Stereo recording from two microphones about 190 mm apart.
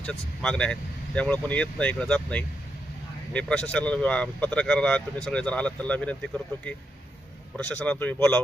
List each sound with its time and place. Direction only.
0.1 s speech: 5° left (ahead or behind)
7.5 s speech: 5° left (ahead or behind)